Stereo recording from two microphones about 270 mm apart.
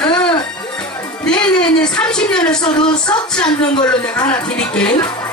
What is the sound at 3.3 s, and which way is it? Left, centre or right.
Speech, centre.